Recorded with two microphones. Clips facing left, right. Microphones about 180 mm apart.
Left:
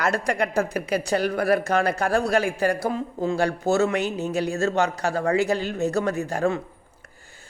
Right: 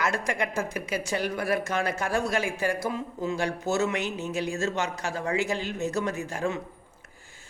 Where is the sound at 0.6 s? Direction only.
60° left (ahead or behind).